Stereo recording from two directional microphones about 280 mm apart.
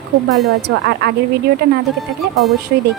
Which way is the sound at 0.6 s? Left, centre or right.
Right.